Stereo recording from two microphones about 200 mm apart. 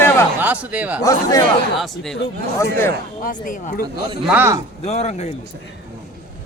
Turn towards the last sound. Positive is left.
turn(degrees=35)  # may be behind; listen again after turning